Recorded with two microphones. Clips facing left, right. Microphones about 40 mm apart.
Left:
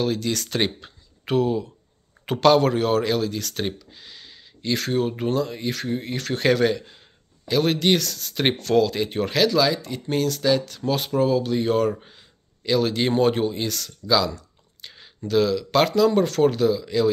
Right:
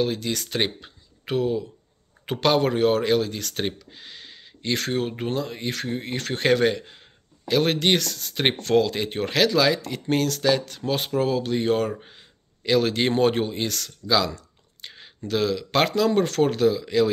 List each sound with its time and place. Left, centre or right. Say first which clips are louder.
0.0 s speech: left 1 dB; centre
2.4 s speech: left 2 dB; centre
5.7 s speech: left 2 dB; right
9.8 s speech: right 1 dB; right
10.9 s speech: left 1 dB; right
11.1 s speech: left 3 dB; right
12.0 s a sound: right 1 dB; right
12.6 s speech: even; right
14.0 s a sound: left 1 dB; right
14.9 s speech: left 2 dB; right